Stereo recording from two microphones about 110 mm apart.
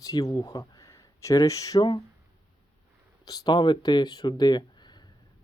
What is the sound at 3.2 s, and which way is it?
Speech, 35° left (ahead or behind).